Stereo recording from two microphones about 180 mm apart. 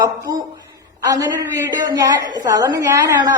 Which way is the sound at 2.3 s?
20° right (ahead or behind).